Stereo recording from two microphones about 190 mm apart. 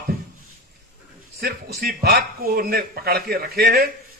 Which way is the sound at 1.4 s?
55° right (ahead or behind).